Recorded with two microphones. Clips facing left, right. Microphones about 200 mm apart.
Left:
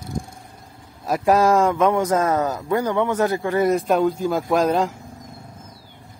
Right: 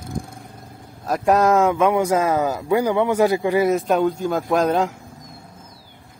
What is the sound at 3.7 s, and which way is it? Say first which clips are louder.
Speech: even; centre (ahead or behind).